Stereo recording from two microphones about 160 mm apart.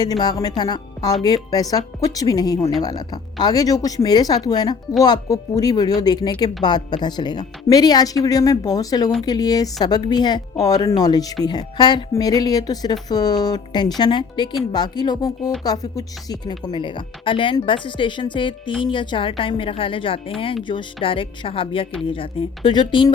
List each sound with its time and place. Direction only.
0.0 s a woman's voice: 25° left (ahead or behind)